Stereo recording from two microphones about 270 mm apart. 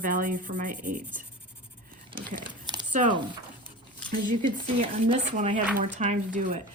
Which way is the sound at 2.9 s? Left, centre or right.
Right.